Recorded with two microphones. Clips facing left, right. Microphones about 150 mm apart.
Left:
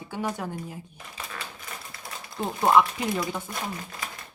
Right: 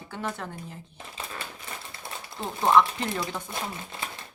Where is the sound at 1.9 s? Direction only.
25° right (ahead or behind).